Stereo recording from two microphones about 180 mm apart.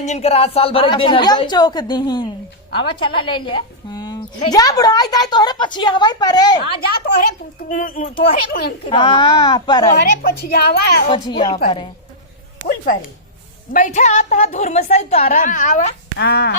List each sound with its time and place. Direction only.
0.0 s a woman's voice: 40° left (ahead or behind); by 6.8 s 20° left (ahead or behind)
7.9 s speech: 50° left (ahead or behind)
8.9 s a woman's voice: 30° left (ahead or behind)
10.2 s speech: 55° left (ahead or behind)
11.1 s a woman's voice: 25° left (ahead or behind)
12.6 s a woman's voice: 50° left (ahead or behind)
16.1 s speech: 65° left (ahead or behind)